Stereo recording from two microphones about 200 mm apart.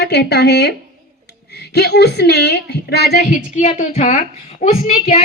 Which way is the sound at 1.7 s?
55° left (ahead or behind).